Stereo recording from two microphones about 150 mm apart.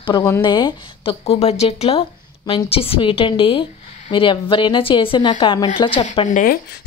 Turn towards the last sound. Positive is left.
turn(degrees=70)  # may be behind; listen again after turning